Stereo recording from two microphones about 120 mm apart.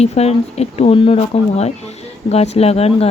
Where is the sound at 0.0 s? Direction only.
60° left (ahead or behind).